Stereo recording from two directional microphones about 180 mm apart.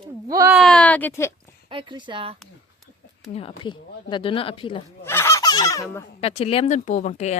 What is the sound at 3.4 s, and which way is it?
Speech, 30° left (ahead or behind).